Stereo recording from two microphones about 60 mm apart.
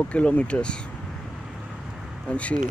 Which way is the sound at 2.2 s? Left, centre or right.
Centre.